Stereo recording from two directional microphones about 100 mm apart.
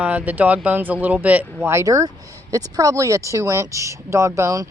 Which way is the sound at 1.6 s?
30° right (ahead or behind).